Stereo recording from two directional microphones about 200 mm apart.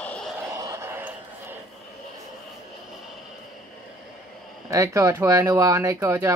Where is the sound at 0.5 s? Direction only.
15° right (ahead or behind).